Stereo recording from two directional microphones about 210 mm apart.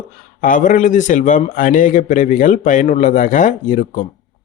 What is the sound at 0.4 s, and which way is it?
Speech, 40° left (ahead or behind).